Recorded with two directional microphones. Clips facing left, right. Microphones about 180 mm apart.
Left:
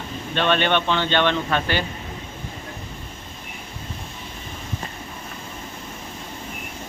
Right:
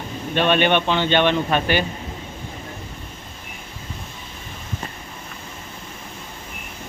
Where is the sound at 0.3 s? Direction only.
15° right (ahead or behind).